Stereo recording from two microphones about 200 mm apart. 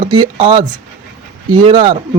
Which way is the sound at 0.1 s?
25° right (ahead or behind).